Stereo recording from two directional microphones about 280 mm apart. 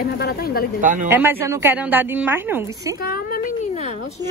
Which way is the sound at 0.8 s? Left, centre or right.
Right.